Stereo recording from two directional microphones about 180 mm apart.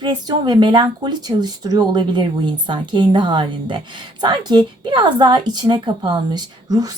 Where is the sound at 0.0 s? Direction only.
25° right (ahead or behind).